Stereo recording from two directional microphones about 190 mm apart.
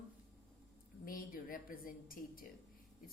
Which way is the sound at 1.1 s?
50° left (ahead or behind).